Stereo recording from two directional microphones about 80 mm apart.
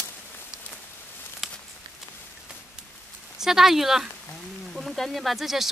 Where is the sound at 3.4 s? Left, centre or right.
Centre.